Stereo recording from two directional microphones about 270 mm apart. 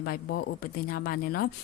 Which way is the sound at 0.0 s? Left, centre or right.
Left.